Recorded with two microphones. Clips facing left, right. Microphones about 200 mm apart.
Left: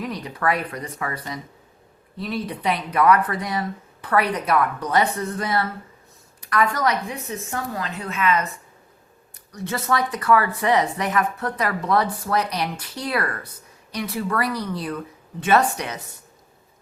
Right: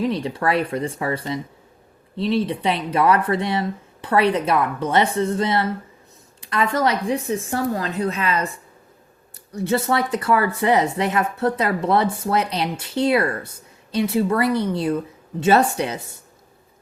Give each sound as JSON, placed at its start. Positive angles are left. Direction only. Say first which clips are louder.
{"t": 0.0, "sound": "a woman's voice", "louder": "right 4 dB", "side_deg": -30}